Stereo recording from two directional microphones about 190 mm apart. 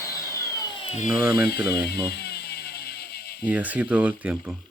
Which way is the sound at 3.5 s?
5° right (ahead or behind).